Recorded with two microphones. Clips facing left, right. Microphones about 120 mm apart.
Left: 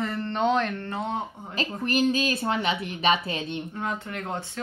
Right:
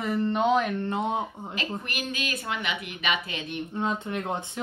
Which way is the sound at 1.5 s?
35° left (ahead or behind).